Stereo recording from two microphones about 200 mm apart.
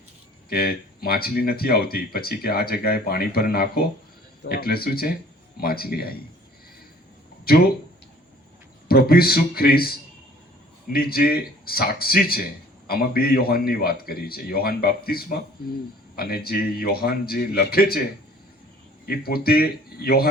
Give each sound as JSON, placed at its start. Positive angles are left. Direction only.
{"t": 0.5, "sound": "speech", "side_deg": 50}
{"t": 7.5, "sound": "speech", "side_deg": 50}
{"t": 8.9, "sound": "speech", "side_deg": 50}
{"t": 10.9, "sound": "speech", "side_deg": 50}
{"t": 19.0, "sound": "speech", "side_deg": 50}